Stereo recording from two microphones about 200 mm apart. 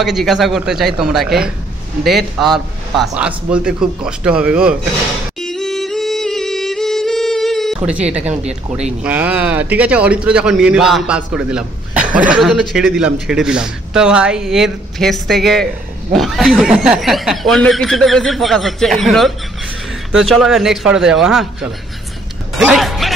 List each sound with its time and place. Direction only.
0.0 s a man's voice: centre (ahead or behind)
5.4 s music: centre (ahead or behind)
8.4 s speech: 35° right (ahead or behind)
9.0 s a man's voice: 5° right (ahead or behind)
22.6 s music: centre (ahead or behind)